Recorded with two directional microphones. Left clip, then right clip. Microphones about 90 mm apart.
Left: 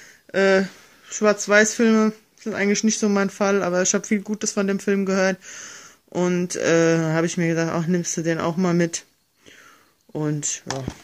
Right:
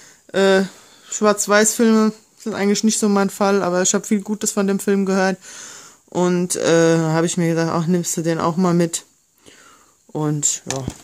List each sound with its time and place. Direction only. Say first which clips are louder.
0.3 s speech: right 2 dB; 30° right (ahead or behind)
10.7 s speech: right 3 dB; 20° right (ahead or behind)